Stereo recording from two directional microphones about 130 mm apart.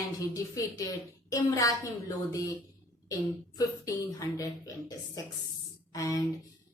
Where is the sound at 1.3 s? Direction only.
25° left (ahead or behind).